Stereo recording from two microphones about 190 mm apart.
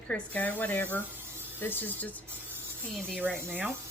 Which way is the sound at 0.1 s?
10° left (ahead or behind).